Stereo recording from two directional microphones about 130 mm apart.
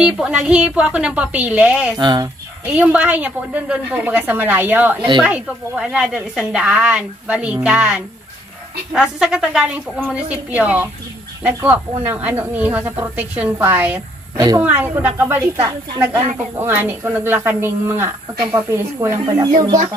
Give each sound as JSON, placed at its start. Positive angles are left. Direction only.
{"t": 0.0, "sound": "a woman's voice", "side_deg": -5}
{"t": 2.0, "sound": "speech", "side_deg": -35}
{"t": 2.6, "sound": "a woman's voice", "side_deg": -10}
{"t": 14.3, "sound": "speech", "side_deg": -30}
{"t": 14.6, "sound": "a woman's voice", "side_deg": -15}